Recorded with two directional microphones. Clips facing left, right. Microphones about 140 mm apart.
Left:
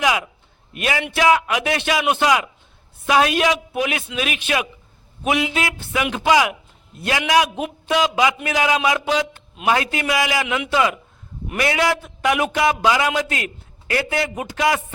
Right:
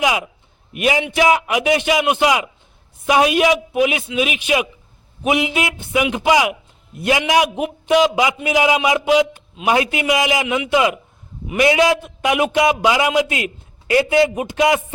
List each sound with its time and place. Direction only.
0.0 s a man's voice: 20° right (ahead or behind)